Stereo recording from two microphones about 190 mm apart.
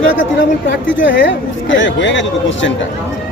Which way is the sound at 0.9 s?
80° left.